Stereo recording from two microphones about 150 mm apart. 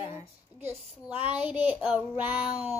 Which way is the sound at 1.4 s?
10° right (ahead or behind).